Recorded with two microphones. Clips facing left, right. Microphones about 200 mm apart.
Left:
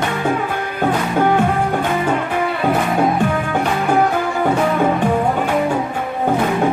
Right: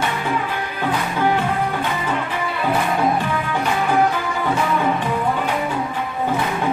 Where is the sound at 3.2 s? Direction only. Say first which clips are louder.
Left 4 dB; 50° left (ahead or behind).